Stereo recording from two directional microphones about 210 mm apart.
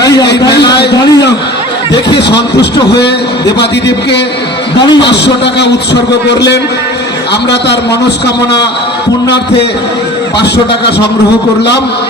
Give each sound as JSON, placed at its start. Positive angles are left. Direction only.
{"t": 0.3, "sound": "a sound", "side_deg": 55}
{"t": 0.9, "sound": "a sound", "side_deg": 20}
{"t": 2.1, "sound": "a man's voice", "side_deg": 55}
{"t": 4.8, "sound": "a man's voice", "side_deg": 20}
{"t": 5.0, "sound": "a man's voice", "side_deg": 55}
{"t": 9.2, "sound": "a man's voice", "side_deg": 55}